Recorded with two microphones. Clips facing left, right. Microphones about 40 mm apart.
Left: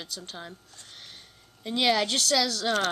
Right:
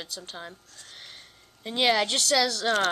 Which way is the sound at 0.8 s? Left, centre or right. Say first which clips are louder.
Right 3 dB; centre.